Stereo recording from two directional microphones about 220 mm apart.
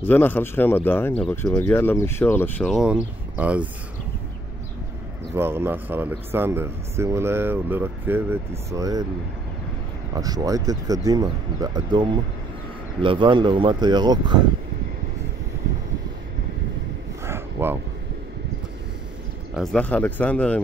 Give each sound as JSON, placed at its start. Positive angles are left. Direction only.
{"t": 0.0, "sound": "speech", "side_deg": 10}
{"t": 2.7, "sound": "speech", "side_deg": -5}
{"t": 5.3, "sound": "speech", "side_deg": -10}
{"t": 10.1, "sound": "speech", "side_deg": -15}
{"t": 17.2, "sound": "a sound", "side_deg": -10}
{"t": 19.5, "sound": "speech", "side_deg": 0}